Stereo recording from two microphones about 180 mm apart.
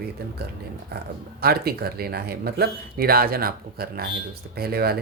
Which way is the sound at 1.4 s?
60° right (ahead or behind).